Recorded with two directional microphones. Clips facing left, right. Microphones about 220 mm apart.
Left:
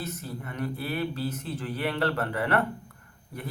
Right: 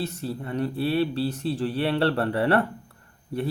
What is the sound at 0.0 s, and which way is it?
Speech, 30° right (ahead or behind).